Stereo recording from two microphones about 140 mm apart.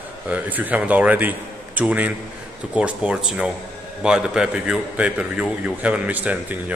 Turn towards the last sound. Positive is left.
turn(degrees=-10)  # may be behind; listen again after turning